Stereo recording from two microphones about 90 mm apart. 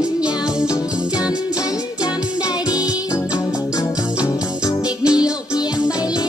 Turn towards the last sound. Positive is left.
turn(degrees=45)  # may be behind; listen again after turning